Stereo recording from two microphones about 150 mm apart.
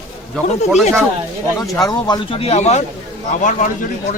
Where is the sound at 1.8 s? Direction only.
25° left (ahead or behind); by 2.9 s 45° left (ahead or behind).